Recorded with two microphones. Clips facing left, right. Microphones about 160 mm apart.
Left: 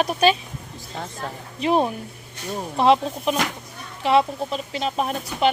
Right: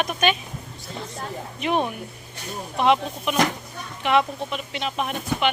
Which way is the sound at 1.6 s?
30° left (ahead or behind).